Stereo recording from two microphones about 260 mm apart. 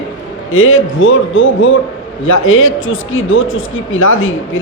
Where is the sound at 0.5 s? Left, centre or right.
Left.